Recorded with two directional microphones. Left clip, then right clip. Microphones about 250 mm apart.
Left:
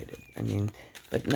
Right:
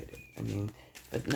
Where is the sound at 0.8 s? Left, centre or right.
Left.